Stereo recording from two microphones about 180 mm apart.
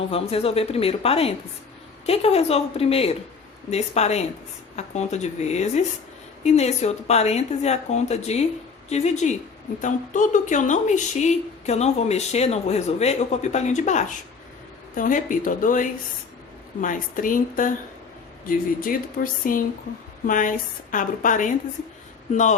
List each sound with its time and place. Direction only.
0.0 s a woman's voice: 35° left (ahead or behind)